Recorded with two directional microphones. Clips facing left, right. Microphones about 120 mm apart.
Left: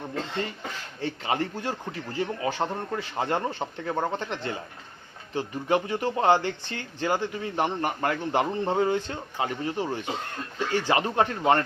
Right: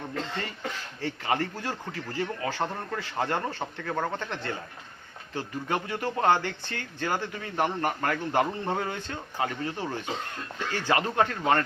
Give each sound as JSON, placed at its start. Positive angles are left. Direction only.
{"t": 1.0, "sound": "speech", "side_deg": 20}